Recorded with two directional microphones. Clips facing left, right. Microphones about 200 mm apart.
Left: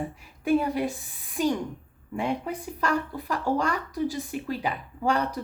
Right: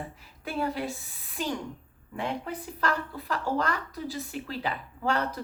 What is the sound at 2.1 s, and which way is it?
A child's voice, 10° left (ahead or behind).